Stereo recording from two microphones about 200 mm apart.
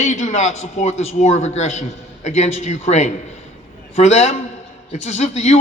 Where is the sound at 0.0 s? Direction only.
35° left (ahead or behind).